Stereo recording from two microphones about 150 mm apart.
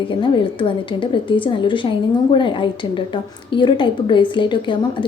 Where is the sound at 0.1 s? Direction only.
35° left (ahead or behind).